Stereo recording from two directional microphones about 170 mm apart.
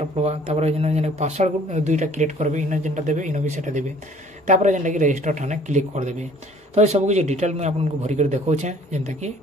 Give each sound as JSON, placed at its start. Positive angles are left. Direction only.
{"t": 0.1, "sound": "a man's voice", "side_deg": -40}